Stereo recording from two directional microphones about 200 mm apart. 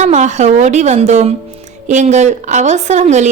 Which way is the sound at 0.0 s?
35° right (ahead or behind).